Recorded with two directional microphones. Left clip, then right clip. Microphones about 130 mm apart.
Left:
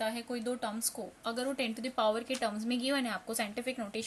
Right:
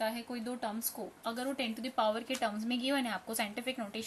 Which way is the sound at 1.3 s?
25° left (ahead or behind).